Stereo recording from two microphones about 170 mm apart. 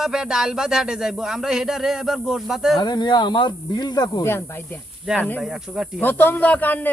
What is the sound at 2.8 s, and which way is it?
A woman's voice, 25° left (ahead or behind).